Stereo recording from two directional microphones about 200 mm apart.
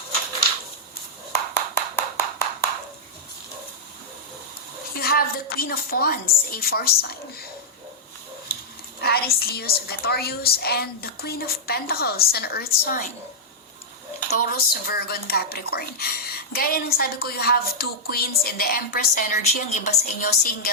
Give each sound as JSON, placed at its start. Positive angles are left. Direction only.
{"t": 1.5, "sound": "a sound", "side_deg": 10}
{"t": 4.9, "sound": "a woman's voice", "side_deg": 50}
{"t": 9.0, "sound": "speech", "side_deg": 50}
{"t": 14.3, "sound": "speech", "side_deg": 50}
{"t": 19.9, "sound": "speech", "side_deg": 50}